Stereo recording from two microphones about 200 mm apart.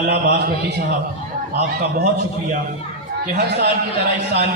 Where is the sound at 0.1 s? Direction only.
50° right (ahead or behind).